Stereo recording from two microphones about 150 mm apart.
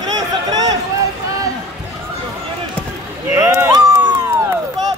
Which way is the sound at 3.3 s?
20° right (ahead or behind).